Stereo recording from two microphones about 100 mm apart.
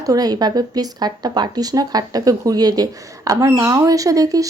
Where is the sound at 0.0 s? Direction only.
40° right (ahead or behind).